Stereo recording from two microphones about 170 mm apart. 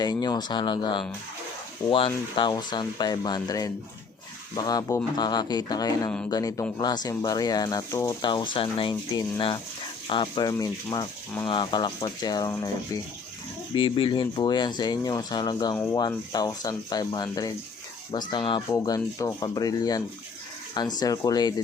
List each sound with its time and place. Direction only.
0.0 s speech: 25° left (ahead or behind)
8.3 s speech: 30° left (ahead or behind)
21.0 s speech: 20° left (ahead or behind)